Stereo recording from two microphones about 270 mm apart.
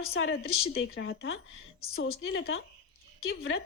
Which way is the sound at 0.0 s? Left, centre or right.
Left.